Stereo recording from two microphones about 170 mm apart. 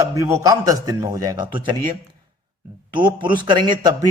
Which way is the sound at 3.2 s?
25° right (ahead or behind).